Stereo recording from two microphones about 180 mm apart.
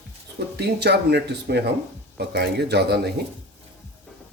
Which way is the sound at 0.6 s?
70° right (ahead or behind).